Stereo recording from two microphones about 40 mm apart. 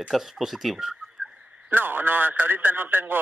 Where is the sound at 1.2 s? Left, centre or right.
Right.